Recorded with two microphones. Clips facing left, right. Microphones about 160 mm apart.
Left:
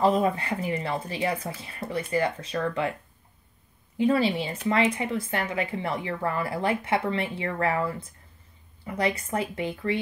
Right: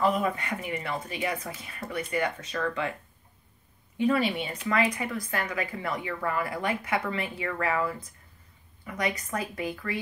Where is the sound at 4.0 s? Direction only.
30° left (ahead or behind).